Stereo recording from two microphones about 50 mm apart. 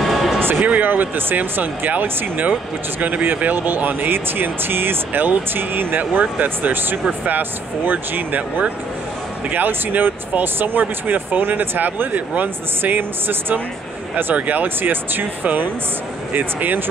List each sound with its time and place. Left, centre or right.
0.0 s music: centre
0.6 s speech: right